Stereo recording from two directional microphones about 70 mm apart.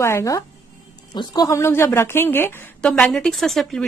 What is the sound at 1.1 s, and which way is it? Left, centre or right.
Speech, left.